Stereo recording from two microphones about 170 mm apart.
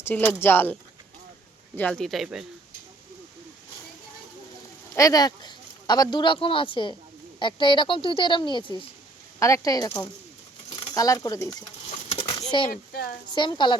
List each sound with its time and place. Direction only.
0.0 s speech: 10° left (ahead or behind)
4.9 s speech: 20° left (ahead or behind)
12.4 s a sound: 25° left (ahead or behind)
12.7 s speech: 60° left (ahead or behind)
13.3 s speech: 25° left (ahead or behind)